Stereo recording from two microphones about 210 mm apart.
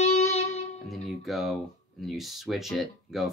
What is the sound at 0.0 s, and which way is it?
Music, 30° left (ahead or behind).